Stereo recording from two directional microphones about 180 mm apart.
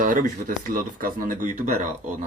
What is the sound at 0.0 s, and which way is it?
Speech, 45° right (ahead or behind).